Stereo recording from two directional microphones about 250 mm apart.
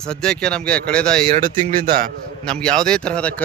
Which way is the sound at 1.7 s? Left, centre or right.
Right.